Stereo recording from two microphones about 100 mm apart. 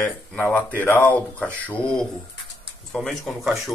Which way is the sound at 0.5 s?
15° left (ahead or behind).